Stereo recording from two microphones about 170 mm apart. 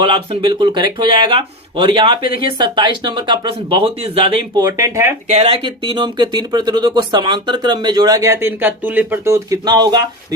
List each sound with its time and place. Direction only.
0.0 s speech: 30° right (ahead or behind)
5.6 s speech: 25° right (ahead or behind)